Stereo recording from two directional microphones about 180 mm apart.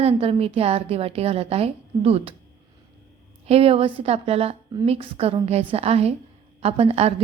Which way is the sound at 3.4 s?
35° right (ahead or behind).